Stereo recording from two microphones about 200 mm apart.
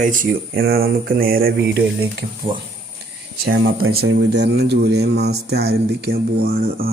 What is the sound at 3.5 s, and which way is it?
Speech, 80° right.